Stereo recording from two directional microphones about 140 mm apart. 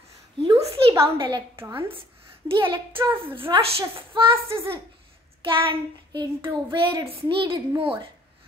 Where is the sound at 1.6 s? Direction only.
15° right (ahead or behind).